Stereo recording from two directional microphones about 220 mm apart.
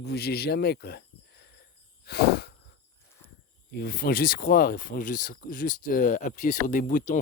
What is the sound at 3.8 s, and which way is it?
Speech, 45° left (ahead or behind).